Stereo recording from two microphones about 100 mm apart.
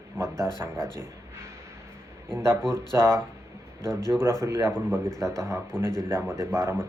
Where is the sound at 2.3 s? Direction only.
25° right (ahead or behind).